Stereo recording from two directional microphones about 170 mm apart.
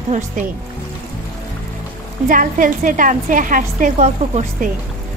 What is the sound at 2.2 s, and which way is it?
A woman's voice, 50° right (ahead or behind).